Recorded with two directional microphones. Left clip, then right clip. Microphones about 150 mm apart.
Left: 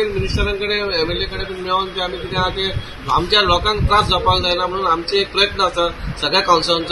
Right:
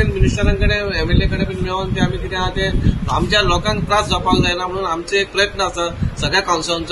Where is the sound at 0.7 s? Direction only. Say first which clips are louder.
Even; 5° right (ahead or behind).